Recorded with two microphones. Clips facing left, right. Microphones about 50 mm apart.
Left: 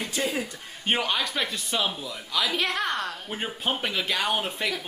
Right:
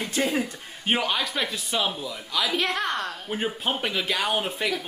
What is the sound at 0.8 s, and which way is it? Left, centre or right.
Speech, centre.